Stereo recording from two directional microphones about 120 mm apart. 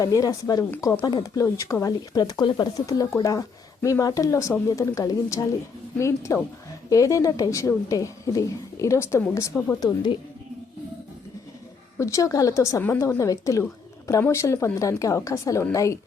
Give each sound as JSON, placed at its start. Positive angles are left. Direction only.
{"t": 0.0, "sound": "speech", "side_deg": 30}
{"t": 9.8, "sound": "speech", "side_deg": 40}
{"t": 11.9, "sound": "speech", "side_deg": 25}